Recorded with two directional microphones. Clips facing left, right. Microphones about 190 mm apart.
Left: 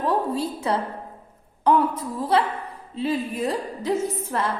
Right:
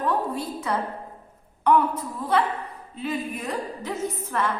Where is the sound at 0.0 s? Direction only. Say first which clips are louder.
Left 3 dB; 30° left (ahead or behind).